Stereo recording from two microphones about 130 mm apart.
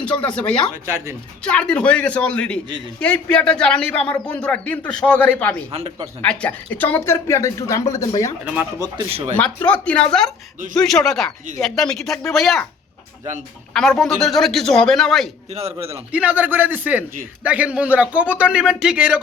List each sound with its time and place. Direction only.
0.3 s speech: 10° left (ahead or behind)
0.9 s speech: 20° right (ahead or behind)
1.4 s speech: 10° left (ahead or behind)
5.7 s a man's voice: 50° right (ahead or behind)
6.2 s speech: 10° left (ahead or behind); by 8.3 s 25° left (ahead or behind)
9.0 s a man's voice: 50° right (ahead or behind)
9.6 s speech: 10° left (ahead or behind)
13.7 s speech: 5° left (ahead or behind)
15.4 s a man's voice: 55° right (ahead or behind)
16.1 s speech: 10° right (ahead or behind)